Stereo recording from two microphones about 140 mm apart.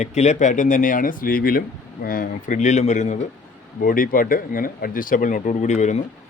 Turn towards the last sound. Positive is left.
turn(degrees=55)  # may be behind; listen again after turning